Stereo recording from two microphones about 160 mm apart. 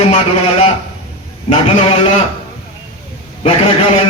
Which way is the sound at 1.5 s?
35° left (ahead or behind).